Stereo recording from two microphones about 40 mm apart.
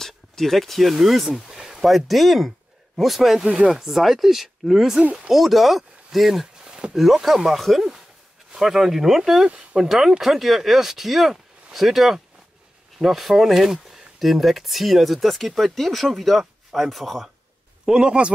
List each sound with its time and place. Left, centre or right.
0.0 s speech: centre
1.9 s speech: centre
3.3 s a man's voice: right
3.6 s speech: centre
6.4 s a sound: centre
7.3 s speech: centre
17.8 s a man's voice: right